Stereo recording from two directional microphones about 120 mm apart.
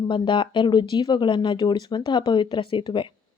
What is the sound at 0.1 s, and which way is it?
A woman's voice, 45° left (ahead or behind).